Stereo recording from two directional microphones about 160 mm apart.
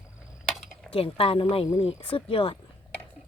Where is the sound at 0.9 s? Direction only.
35° left (ahead or behind).